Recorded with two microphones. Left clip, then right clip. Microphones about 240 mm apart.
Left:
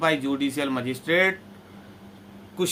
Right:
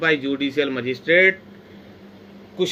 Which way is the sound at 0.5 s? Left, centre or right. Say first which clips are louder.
Right 5 dB; left.